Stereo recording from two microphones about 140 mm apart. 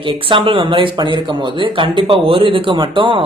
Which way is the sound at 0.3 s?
35° right (ahead or behind).